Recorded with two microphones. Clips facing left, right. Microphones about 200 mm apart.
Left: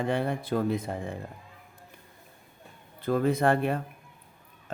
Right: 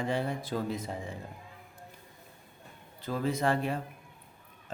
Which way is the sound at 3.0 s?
55° left (ahead or behind).